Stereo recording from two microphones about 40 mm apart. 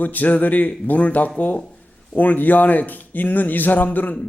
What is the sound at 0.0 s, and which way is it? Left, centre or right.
A man's voice, left.